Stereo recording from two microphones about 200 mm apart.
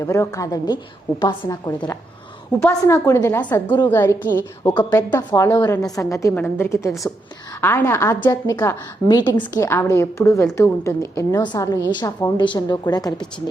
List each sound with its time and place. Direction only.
0.0 s a woman's voice: 15° left (ahead or behind)